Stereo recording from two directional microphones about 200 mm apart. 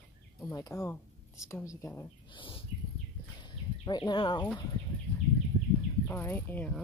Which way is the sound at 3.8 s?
20° left (ahead or behind).